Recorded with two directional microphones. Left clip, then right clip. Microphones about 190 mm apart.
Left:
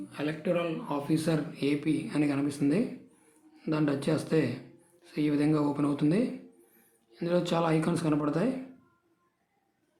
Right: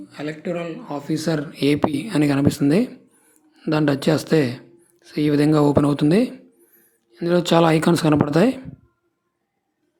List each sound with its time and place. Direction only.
0.1 s speech: 25° right (ahead or behind); by 8.5 s 45° right (ahead or behind)